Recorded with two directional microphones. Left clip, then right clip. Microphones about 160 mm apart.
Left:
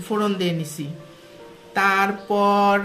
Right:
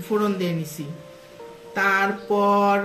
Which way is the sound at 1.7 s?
50° left (ahead or behind).